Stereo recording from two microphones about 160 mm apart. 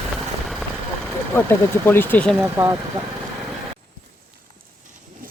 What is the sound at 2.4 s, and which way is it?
Speech, 15° right (ahead or behind).